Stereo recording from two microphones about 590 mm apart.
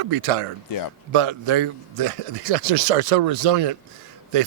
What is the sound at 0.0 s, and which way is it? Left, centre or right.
Speech, right.